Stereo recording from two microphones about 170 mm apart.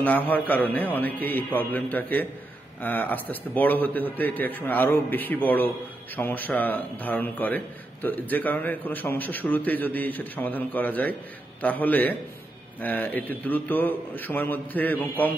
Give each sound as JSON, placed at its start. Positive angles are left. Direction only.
{"t": 0.0, "sound": "a man's voice", "side_deg": 10}